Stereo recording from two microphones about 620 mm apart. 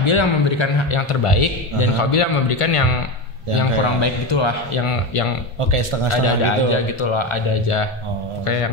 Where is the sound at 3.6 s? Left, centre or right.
Left.